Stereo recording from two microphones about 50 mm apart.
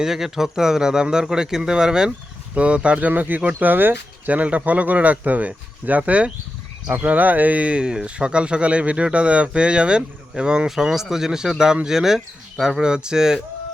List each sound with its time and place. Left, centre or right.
0.0 s speech: centre
3.1 s speech: right; by 13.4 s centre